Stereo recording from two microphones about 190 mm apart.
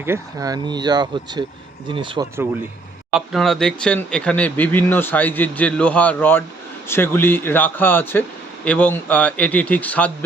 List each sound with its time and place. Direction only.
0.0 s speech: 15° right (ahead or behind)
3.1 s speech: centre (ahead or behind)